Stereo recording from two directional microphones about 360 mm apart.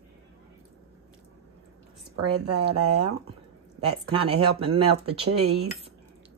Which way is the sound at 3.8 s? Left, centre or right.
Centre.